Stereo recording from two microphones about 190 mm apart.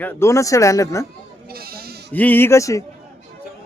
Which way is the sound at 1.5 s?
55° right (ahead or behind).